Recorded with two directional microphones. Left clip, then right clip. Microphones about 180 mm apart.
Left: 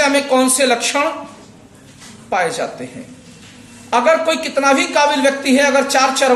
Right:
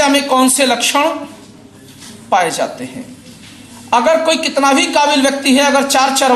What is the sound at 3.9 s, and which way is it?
A man's voice, 15° left (ahead or behind).